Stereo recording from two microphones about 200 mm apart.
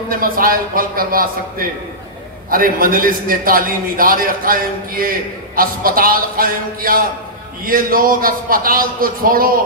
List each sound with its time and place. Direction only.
0.1 s a man's voice: 45° right (ahead or behind)
2.5 s a man's voice: 45° right (ahead or behind)